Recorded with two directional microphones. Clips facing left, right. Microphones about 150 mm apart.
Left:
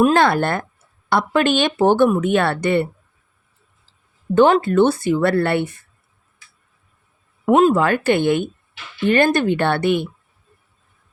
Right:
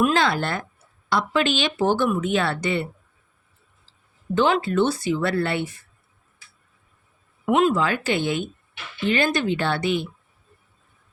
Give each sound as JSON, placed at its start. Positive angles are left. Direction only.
{"t": 0.0, "sound": "speech", "side_deg": 50}
{"t": 4.4, "sound": "speech", "side_deg": 50}
{"t": 7.4, "sound": "speech", "side_deg": 40}